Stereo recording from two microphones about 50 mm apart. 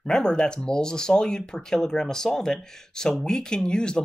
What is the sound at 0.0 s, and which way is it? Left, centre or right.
Speech, centre.